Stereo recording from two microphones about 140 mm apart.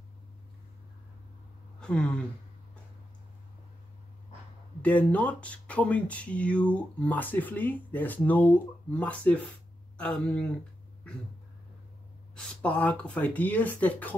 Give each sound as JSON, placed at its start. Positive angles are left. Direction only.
{"t": 1.8, "sound": "speech", "side_deg": 5}
{"t": 4.8, "sound": "speech", "side_deg": 10}
{"t": 12.4, "sound": "speech", "side_deg": 10}